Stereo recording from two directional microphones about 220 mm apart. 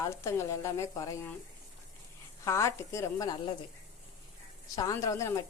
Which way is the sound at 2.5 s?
15° left (ahead or behind).